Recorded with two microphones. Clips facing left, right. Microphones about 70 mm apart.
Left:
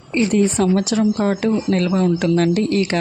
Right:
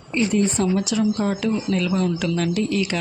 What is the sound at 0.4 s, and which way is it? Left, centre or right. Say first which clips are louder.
Speech: left 4 dB; left.